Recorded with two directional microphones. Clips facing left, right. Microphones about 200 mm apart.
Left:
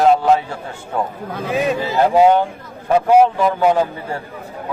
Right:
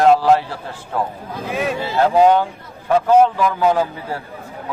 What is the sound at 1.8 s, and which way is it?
Speech, 10° left (ahead or behind).